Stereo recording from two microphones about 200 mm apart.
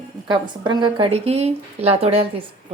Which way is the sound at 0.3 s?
20° right (ahead or behind).